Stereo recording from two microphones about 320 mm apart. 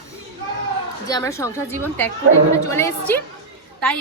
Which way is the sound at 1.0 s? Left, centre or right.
Centre.